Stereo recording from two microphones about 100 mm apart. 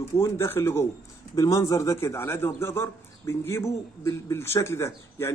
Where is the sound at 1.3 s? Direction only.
35° left (ahead or behind).